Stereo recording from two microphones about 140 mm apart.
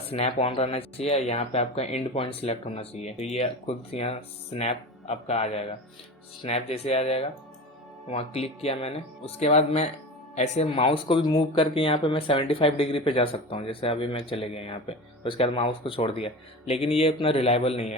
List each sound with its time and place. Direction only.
0.1 s speech: 45° left (ahead or behind)